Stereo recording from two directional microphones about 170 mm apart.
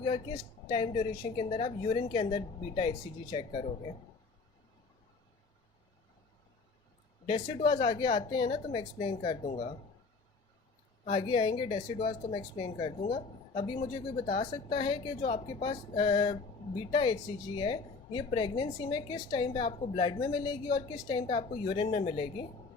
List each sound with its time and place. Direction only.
0.0 s a woman's voice: 30° left (ahead or behind)
7.3 s speech: 30° left (ahead or behind)
11.1 s speech: 30° left (ahead or behind)